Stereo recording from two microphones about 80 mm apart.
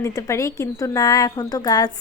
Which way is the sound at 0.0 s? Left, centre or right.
Left.